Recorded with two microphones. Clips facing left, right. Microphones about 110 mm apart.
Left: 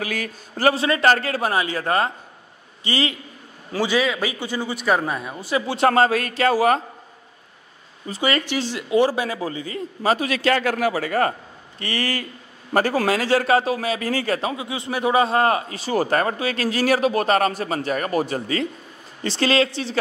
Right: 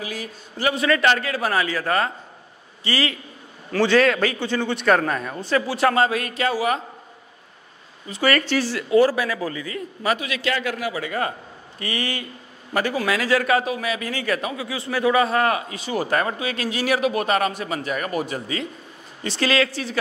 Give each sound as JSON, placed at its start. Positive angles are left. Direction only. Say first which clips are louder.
{"t": 0.0, "sound": "a man's voice", "louder": "left 4 dB", "side_deg": 60}
{"t": 0.7, "sound": "a man's voice", "louder": "right 1 dB", "side_deg": 25}
{"t": 1.0, "sound": "speech", "louder": "left 2 dB", "side_deg": 40}
{"t": 1.5, "sound": "a man's voice", "louder": "right 1 dB", "side_deg": 25}
{"t": 3.7, "sound": "a man's voice", "louder": "right 4 dB", "side_deg": 10}
{"t": 5.9, "sound": "speech", "louder": "left 4 dB", "side_deg": 40}
{"t": 8.2, "sound": "a man's voice", "louder": "right 2 dB", "side_deg": 20}
{"t": 19.2, "sound": "a man's voice", "louder": "left 2 dB", "side_deg": 30}